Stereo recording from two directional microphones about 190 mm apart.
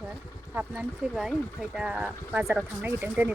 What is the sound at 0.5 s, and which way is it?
Speech, 5° right (ahead or behind).